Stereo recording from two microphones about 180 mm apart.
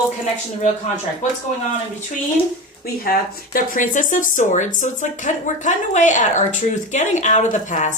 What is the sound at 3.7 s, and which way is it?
Speech, 45° left (ahead or behind).